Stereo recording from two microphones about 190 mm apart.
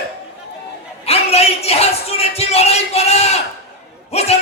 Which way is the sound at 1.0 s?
30° left (ahead or behind).